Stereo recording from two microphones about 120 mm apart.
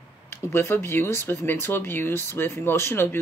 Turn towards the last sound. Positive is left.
turn(degrees=20)  # may be behind; listen again after turning